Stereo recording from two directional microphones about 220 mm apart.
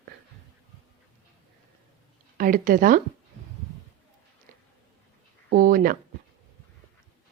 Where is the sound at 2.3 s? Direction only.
40° right (ahead or behind).